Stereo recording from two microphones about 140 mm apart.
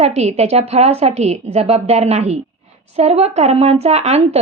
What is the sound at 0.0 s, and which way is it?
A woman's voice, 50° right (ahead or behind).